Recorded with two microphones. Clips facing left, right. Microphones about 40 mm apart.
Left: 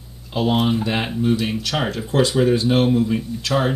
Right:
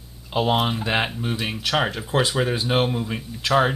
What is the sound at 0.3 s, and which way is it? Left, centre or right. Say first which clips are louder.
Speech: left 2 dB; centre.